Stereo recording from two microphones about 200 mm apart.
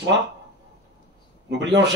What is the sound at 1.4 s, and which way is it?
Speech, 60° right (ahead or behind).